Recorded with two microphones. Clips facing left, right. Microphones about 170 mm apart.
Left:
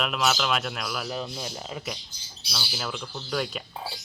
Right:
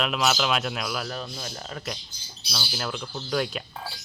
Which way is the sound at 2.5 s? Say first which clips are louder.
Right 2 dB; centre (ahead or behind).